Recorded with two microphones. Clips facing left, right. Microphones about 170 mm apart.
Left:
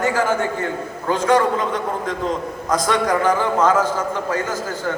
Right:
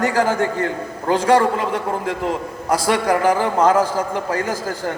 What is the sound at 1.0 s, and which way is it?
A man's voice, 35° right (ahead or behind).